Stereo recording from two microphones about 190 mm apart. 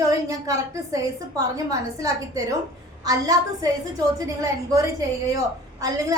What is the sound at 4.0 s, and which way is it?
A woman's voice, 20° right (ahead or behind).